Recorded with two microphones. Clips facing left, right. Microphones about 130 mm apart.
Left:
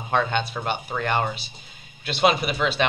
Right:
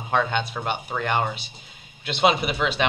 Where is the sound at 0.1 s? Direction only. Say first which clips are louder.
Even; 10° right (ahead or behind).